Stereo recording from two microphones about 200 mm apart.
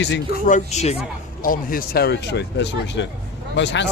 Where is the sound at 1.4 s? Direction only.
45° left (ahead or behind).